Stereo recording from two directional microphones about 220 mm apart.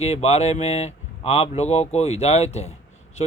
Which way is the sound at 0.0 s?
30° left (ahead or behind).